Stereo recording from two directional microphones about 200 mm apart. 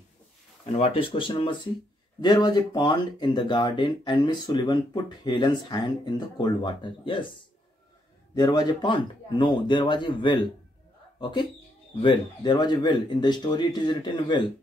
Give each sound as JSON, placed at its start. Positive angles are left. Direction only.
{"t": 0.7, "sound": "speech", "side_deg": 30}
{"t": 8.4, "sound": "speech", "side_deg": 20}